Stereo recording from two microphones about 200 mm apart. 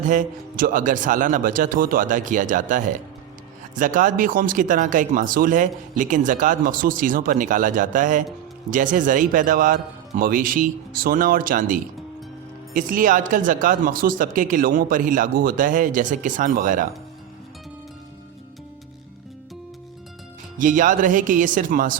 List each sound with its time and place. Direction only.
0.0 s a man's voice: 40° right (ahead or behind)
20.6 s speech: 40° right (ahead or behind)